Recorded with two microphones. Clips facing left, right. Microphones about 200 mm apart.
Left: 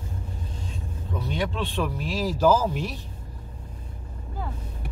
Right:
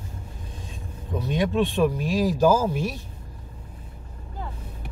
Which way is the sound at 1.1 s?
15° right (ahead or behind).